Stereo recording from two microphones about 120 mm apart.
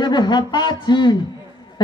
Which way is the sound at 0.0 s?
35° left (ahead or behind).